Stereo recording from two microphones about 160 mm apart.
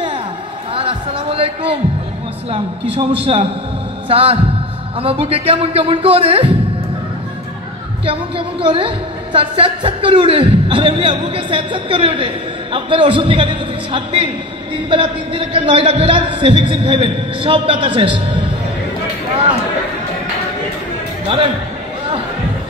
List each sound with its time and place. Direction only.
0.7 s a sound: 35° right (ahead or behind)
2.5 s a woman's voice: 35° right (ahead or behind)
8.0 s a woman's voice: 35° right (ahead or behind)